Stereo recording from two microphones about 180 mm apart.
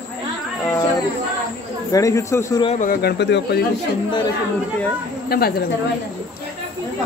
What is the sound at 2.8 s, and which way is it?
Speech, 55° left (ahead or behind).